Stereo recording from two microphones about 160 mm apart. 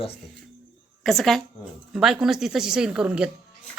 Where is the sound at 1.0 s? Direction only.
Centre (ahead or behind).